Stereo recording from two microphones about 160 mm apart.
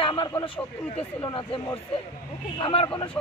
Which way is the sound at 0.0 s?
30° left (ahead or behind).